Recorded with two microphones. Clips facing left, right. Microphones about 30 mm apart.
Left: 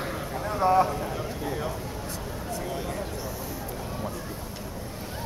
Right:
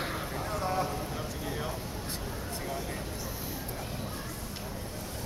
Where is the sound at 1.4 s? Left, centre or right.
Centre.